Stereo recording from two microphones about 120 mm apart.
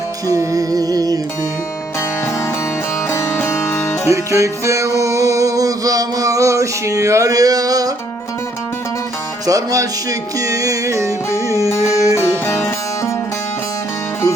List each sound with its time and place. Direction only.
0.3 s music: 30° right (ahead or behind)
3.1 s music: 25° left (ahead or behind)
4.1 s music: 25° right (ahead or behind)
9.5 s music: 25° right (ahead or behind)